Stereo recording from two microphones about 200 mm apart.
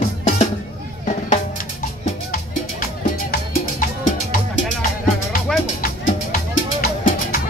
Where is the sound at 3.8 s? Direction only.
40° left (ahead or behind).